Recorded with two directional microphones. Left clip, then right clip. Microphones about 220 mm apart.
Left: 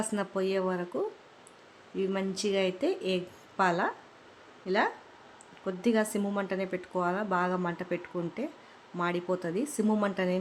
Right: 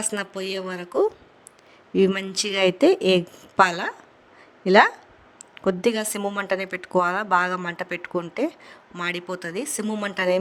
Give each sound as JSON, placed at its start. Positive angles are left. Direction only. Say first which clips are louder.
{"t": 0.0, "sound": "speech", "louder": "right 3 dB", "side_deg": -45}
{"t": 2.0, "sound": "speech", "louder": "right 10 dB", "side_deg": -45}